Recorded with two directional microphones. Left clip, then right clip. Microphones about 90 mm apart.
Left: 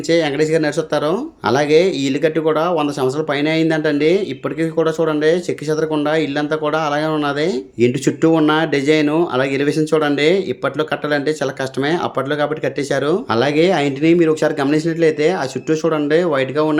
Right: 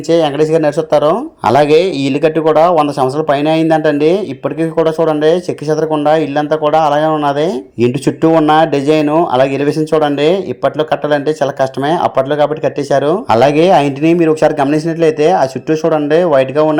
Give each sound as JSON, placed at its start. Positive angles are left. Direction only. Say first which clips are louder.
{"t": 0.1, "sound": "speech", "louder": "right 5 dB", "side_deg": -35}
{"t": 1.5, "sound": "speech", "louder": "right 5 dB", "side_deg": -60}
{"t": 2.4, "sound": "speech", "louder": "right 7 dB", "side_deg": -40}
{"t": 13.3, "sound": "speech", "louder": "right 8 dB", "side_deg": -50}